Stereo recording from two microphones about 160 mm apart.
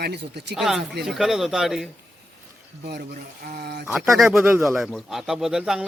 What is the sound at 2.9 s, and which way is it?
Speech, 80° right.